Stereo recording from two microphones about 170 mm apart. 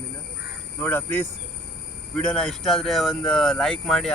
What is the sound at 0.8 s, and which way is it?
Speech, 10° left (ahead or behind).